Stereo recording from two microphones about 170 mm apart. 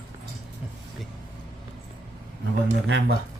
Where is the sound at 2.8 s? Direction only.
80° right.